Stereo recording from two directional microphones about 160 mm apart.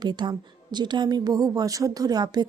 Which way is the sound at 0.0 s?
25° right (ahead or behind).